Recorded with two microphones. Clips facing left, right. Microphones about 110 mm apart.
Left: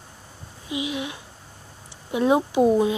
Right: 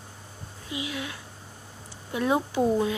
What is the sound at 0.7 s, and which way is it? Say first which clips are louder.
A woman's voice: left 5 dB; 20° left (ahead or behind).